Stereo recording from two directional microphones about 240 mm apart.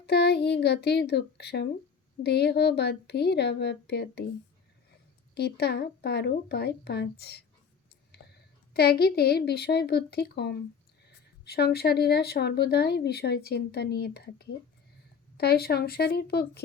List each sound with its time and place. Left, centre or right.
0.0 s speech: left
5.3 s a woman's voice: left